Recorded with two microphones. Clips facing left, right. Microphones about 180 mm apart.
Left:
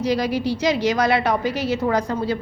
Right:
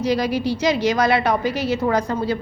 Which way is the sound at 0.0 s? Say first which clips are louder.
Right 1 dB; 55° right (ahead or behind).